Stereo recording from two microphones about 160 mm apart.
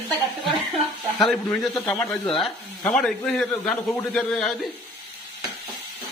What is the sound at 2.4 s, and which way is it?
Speech, 5° left (ahead or behind).